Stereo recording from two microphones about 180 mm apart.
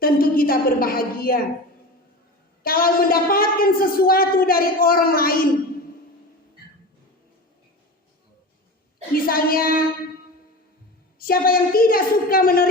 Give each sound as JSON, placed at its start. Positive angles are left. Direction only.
{"t": 0.0, "sound": "a woman's voice", "side_deg": 55}
{"t": 2.6, "sound": "a woman's voice", "side_deg": 55}
{"t": 9.1, "sound": "a woman's voice", "side_deg": 55}
{"t": 11.2, "sound": "a woman's voice", "side_deg": 55}